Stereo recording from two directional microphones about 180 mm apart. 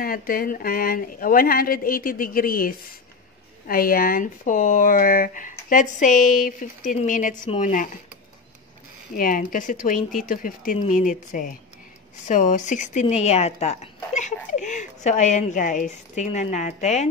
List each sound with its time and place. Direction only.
0.0 s speech: 55° left (ahead or behind)
9.1 s speech: 50° left (ahead or behind)